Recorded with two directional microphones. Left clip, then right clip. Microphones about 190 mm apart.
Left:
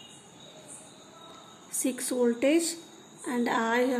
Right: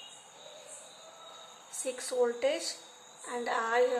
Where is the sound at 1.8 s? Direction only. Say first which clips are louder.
Left 3 dB; 50° left (ahead or behind).